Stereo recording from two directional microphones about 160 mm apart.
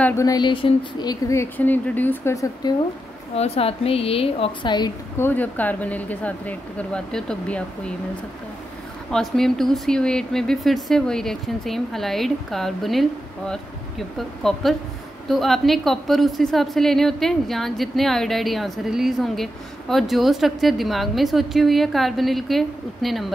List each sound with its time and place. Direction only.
0.0 s speech: 15° left (ahead or behind)
1.2 s speech: 15° left (ahead or behind)
3.3 s a woman's voice: 40° left (ahead or behind)
5.2 s speech: 10° left (ahead or behind)
9.1 s a woman's voice: 5° left (ahead or behind)